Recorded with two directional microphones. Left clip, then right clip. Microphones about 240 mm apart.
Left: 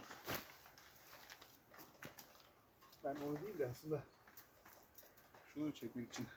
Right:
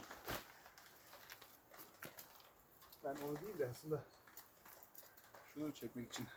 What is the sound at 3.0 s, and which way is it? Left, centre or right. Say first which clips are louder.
Speech: left 1 dB; centre.